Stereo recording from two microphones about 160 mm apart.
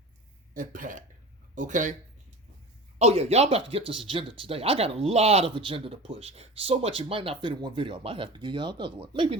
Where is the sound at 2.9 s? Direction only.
40° right (ahead or behind).